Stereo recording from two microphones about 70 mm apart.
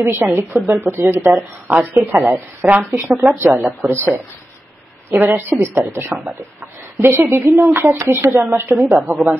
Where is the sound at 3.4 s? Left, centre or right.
Right.